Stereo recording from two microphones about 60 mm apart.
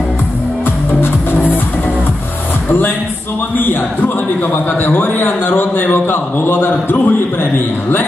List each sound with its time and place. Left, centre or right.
1.0 s music: left
3.5 s a man's voice: left